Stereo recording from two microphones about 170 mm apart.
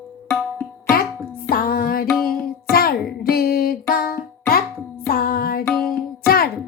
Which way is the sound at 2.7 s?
60° left (ahead or behind).